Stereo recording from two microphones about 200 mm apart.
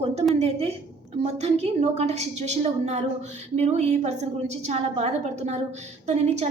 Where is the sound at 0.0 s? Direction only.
30° right (ahead or behind).